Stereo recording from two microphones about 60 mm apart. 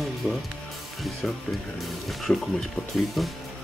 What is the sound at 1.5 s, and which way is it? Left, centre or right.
Speech, centre.